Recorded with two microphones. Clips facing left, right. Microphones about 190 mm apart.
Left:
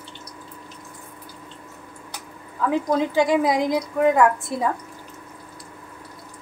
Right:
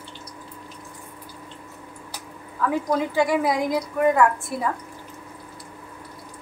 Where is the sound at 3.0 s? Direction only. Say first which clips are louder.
Left 3 dB; 20° left (ahead or behind).